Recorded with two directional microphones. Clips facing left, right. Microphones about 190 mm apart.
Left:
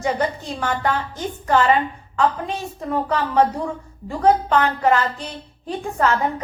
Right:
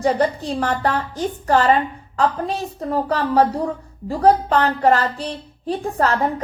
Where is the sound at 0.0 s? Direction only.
35° right (ahead or behind).